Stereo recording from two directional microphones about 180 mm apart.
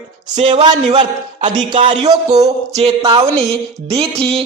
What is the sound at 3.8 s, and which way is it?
Speech, 35° right (ahead or behind).